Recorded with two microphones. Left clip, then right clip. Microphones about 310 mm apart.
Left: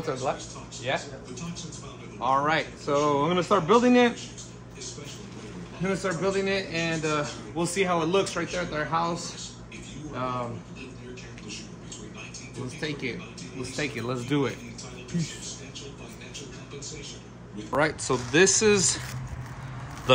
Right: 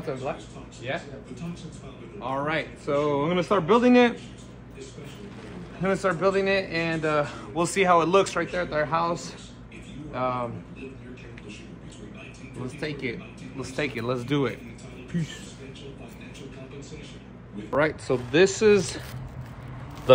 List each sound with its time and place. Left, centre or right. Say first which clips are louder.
0.0 s a man's voice: left 2 dB; centre
2.1 s a man's voice: left 4 dB; centre
5.8 s a man's voice: right 4 dB; centre
13.7 s a man's voice: right 3 dB; centre
17.6 s a man's voice: right 1 dB; centre